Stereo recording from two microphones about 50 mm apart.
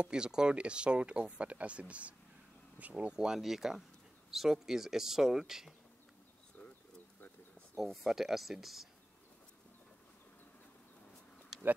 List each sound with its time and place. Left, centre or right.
0.0 s speech: centre
3.3 s speech: centre
7.7 s speech: centre